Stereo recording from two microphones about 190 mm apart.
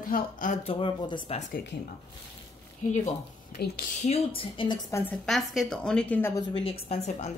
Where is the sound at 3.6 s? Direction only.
55° left (ahead or behind).